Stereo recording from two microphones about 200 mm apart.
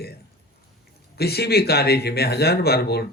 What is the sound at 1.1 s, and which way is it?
Speech, 55° left (ahead or behind).